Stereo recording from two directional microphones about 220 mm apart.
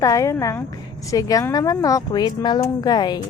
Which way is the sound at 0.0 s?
15° left (ahead or behind).